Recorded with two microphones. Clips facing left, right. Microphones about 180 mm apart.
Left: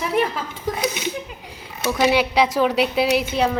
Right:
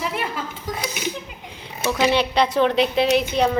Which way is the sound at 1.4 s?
5° left (ahead or behind).